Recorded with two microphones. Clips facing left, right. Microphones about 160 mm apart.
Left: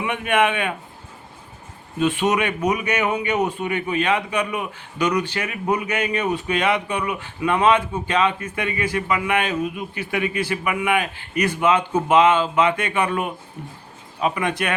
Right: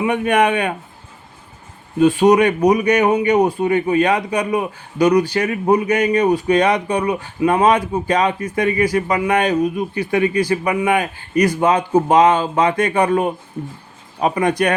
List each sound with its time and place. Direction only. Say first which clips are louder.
0.0 s speech: right 4 dB; 40° right (ahead or behind)
2.0 s speech: right 8 dB; 35° right (ahead or behind)